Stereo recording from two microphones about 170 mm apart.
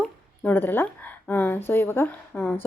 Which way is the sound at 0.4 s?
10° left (ahead or behind).